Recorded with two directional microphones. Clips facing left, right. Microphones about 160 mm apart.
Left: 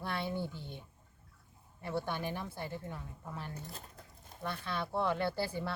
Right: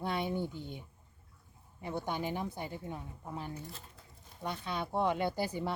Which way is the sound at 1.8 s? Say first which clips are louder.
Right 1 dB; 15° right (ahead or behind).